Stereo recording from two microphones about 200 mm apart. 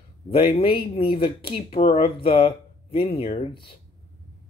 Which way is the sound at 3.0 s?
30° left (ahead or behind).